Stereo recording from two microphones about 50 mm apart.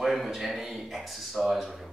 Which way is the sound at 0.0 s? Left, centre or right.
Centre.